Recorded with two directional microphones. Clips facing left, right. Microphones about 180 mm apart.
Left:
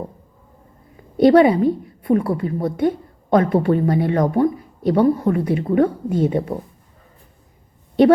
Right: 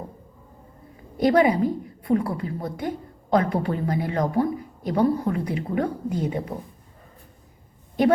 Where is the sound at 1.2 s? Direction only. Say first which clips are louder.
Left 7 dB; 25° left (ahead or behind).